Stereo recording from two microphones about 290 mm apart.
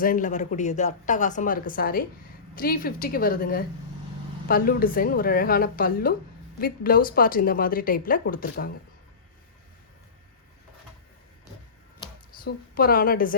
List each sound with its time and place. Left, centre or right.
0.0 s a woman's voice: left
12.5 s a woman's voice: left